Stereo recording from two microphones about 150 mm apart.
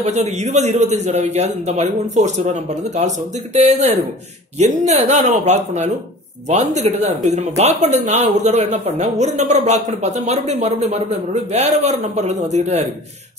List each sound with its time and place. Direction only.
0.0 s speech: 50° right (ahead or behind)